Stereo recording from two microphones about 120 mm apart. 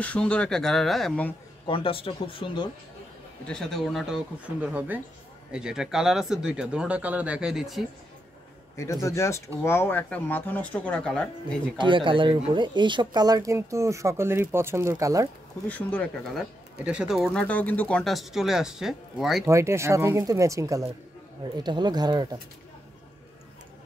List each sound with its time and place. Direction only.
0.0 s speech: 10° left (ahead or behind)
1.7 s speech: 50° left (ahead or behind)
3.4 s speech: 5° left (ahead or behind)
8.7 s speech: 25° left (ahead or behind); by 11.2 s 5° left (ahead or behind)
11.8 s speech: 45° right (ahead or behind); by 15.2 s 25° right (ahead or behind)
16.3 s speech: 10° right (ahead or behind)
17.2 s speech: 5° left (ahead or behind)
19.4 s speech: 25° right (ahead or behind)